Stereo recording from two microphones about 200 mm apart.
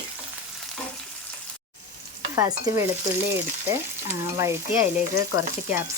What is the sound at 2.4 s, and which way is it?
Frying, 15° right (ahead or behind).